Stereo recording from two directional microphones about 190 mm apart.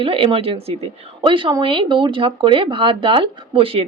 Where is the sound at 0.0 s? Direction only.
30° right (ahead or behind).